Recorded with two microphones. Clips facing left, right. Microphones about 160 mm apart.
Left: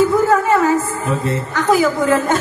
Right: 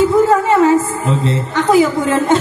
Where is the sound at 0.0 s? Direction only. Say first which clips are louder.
Right 2 dB; 25° right (ahead or behind).